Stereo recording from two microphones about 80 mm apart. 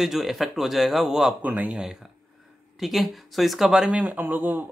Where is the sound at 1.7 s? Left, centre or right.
Centre.